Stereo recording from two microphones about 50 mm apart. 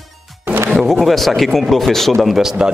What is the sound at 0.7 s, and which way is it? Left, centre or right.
A man's voice, centre.